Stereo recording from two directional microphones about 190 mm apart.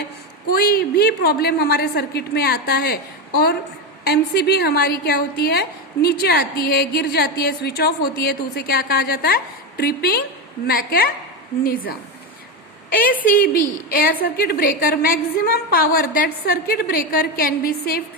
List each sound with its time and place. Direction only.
0.5 s a woman's voice: 50° left (ahead or behind)
4.0 s a woman's voice: 60° left (ahead or behind)